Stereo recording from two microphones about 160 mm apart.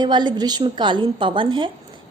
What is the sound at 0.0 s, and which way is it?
A woman's voice, 25° right (ahead or behind).